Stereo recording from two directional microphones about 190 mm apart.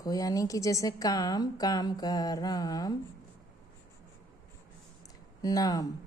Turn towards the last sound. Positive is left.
turn(degrees=20)  # may be behind; listen again after turning